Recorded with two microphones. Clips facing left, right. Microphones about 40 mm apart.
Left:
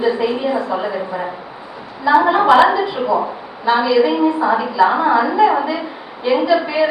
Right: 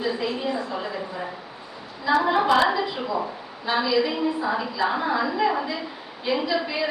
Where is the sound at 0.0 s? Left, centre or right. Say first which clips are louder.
Left 9 dB; centre.